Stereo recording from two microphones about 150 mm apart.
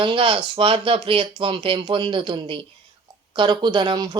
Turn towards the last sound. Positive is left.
turn(degrees=-30)  # may be behind; listen again after turning